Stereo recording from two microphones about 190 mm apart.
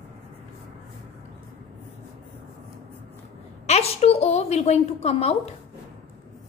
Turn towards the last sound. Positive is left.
turn(degrees=35)  # may be behind; listen again after turning